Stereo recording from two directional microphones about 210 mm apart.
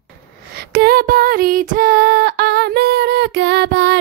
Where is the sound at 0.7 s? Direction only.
45° right (ahead or behind).